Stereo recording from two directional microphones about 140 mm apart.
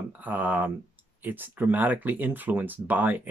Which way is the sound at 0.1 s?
10° right (ahead or behind).